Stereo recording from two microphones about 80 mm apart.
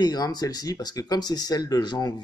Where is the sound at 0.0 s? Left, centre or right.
Left.